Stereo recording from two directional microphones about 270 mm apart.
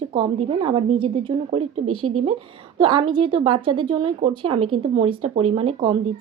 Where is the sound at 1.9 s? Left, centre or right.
Right.